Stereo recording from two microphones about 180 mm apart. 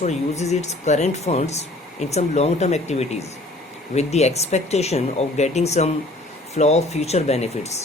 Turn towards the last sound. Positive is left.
turn(degrees=35)  # may be behind; listen again after turning